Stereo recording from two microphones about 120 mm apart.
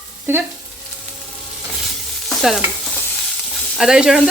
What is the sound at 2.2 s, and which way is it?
Stir, centre (ahead or behind).